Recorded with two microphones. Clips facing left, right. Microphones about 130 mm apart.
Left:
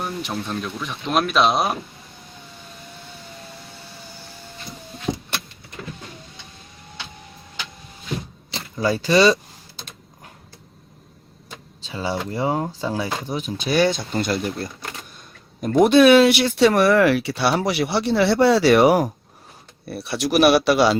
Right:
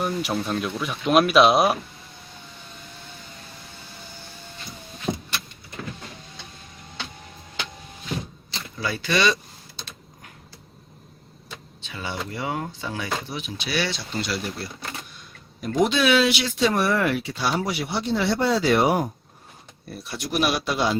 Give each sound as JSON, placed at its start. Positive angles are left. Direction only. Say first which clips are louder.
{"t": 0.0, "sound": "speech", "louder": "right 2 dB", "side_deg": -5}
{"t": 8.8, "sound": "speech", "louder": "left 7 dB", "side_deg": 40}
{"t": 11.9, "sound": "speech", "louder": "left 6 dB", "side_deg": 35}
{"t": 15.7, "sound": "speech", "louder": "left 8 dB", "side_deg": 55}
{"t": 19.9, "sound": "speech", "louder": "left 8 dB", "side_deg": 75}